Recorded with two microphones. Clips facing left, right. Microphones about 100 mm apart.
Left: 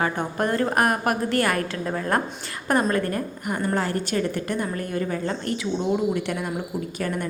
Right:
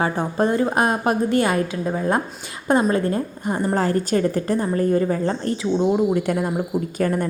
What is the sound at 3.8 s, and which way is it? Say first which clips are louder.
A woman's voice: right 5 dB; 35° right (ahead or behind).